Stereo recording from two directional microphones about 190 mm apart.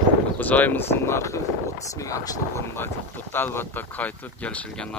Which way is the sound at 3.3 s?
10° left (ahead or behind).